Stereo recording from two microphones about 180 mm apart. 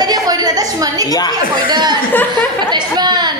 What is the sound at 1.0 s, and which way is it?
Speech, 20° left (ahead or behind).